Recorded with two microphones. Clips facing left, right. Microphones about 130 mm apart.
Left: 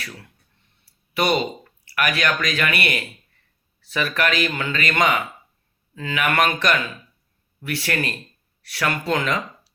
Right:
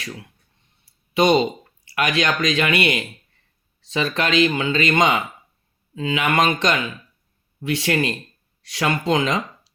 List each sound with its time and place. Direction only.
1.1 s speech: 20° right (ahead or behind)